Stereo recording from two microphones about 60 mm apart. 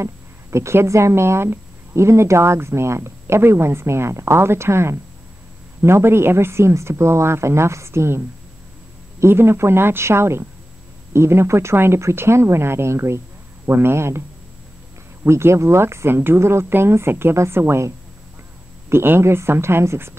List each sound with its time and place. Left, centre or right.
0.0 s speech: right
9.2 s speech: right
15.2 s speech: right